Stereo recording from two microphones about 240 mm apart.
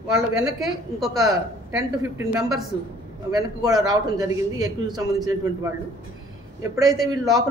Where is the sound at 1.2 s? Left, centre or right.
Centre.